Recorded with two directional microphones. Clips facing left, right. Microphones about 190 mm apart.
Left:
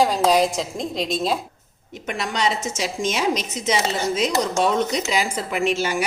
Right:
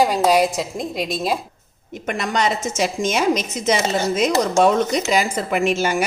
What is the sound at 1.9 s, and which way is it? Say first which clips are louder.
A woman's voice: right 4 dB; 50° right (ahead or behind).